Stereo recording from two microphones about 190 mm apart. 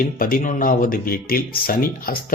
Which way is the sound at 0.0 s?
45° left (ahead or behind).